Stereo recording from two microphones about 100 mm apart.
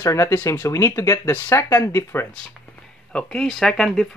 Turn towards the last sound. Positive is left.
turn(degrees=5)  # may be behind; listen again after turning